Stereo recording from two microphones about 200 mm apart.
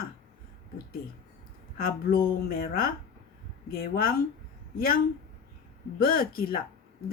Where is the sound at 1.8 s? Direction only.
45° left (ahead or behind).